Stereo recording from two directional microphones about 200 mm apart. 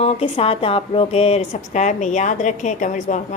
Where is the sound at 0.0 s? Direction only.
30° left (ahead or behind).